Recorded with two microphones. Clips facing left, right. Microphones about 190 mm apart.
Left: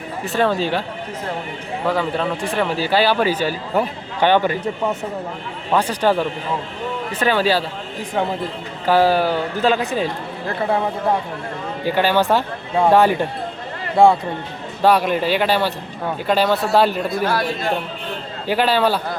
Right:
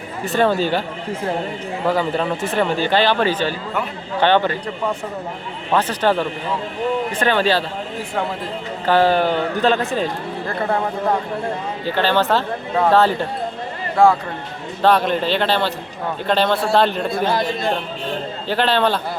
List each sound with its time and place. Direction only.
0.3 s speech: centre (ahead or behind)
1.9 s speech: centre (ahead or behind)
5.7 s speech: 10° left (ahead or behind)
8.9 s speech: 10° left (ahead or behind)
11.9 s speech: 10° left (ahead or behind)
14.8 s speech: 10° left (ahead or behind)
17.2 s speech: 20° right (ahead or behind)
18.4 s speech: 10° left (ahead or behind)